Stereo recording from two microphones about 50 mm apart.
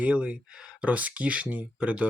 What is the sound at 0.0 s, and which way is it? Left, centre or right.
Speech, right.